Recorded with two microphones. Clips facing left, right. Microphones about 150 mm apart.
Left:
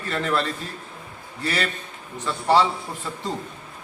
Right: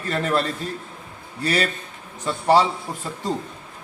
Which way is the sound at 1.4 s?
40° right (ahead or behind).